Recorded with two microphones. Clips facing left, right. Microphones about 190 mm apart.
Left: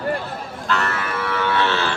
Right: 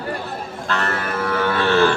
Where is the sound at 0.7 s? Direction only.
40° right (ahead or behind).